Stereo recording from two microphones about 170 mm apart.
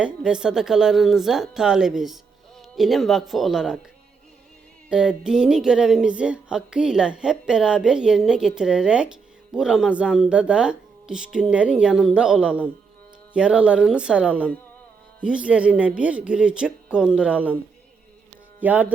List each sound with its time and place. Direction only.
0.0 s speech: 5° right (ahead or behind)
4.9 s speech: 5° right (ahead or behind)
18.6 s speech: 10° right (ahead or behind)